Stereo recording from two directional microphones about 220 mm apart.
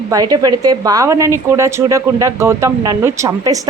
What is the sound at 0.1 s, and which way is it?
A woman's voice, 15° right (ahead or behind).